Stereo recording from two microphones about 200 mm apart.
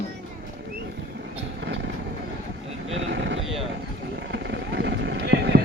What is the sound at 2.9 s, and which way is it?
Sheep, 65° right (ahead or behind).